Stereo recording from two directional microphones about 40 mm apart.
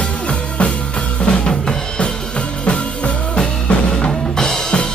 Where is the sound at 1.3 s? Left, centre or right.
Left.